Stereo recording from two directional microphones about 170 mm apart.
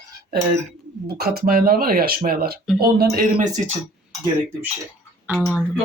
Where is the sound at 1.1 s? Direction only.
65° right (ahead or behind).